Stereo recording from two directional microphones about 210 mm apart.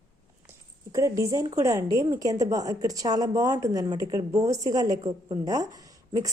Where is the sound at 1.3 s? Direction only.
15° right (ahead or behind).